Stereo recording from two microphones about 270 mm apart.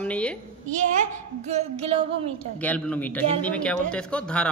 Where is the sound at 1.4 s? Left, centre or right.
Right.